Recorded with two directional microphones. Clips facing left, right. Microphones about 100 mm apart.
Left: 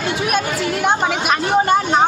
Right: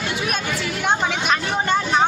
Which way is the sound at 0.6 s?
40° left (ahead or behind).